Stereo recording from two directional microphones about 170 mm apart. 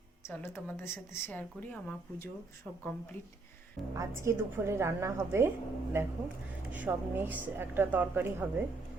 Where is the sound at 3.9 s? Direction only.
15° right (ahead or behind).